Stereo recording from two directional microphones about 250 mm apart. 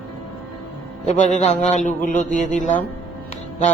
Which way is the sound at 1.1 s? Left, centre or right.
Left.